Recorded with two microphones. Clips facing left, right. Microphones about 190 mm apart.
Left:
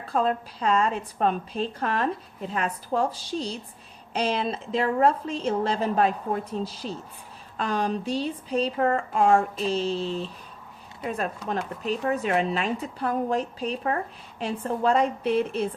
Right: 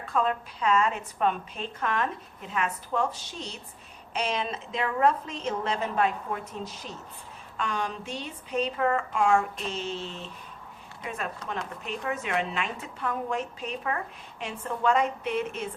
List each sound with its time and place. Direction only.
0.0 s a woman's voice: 35° left (ahead or behind)
11.9 s a woman's voice: 35° left (ahead or behind)